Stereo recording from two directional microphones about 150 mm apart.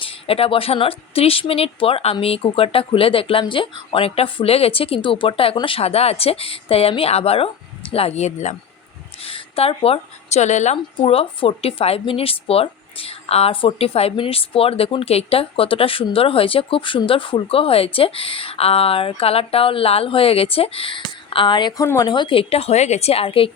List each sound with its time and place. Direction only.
0.0 s a woman's voice: 40° left (ahead or behind)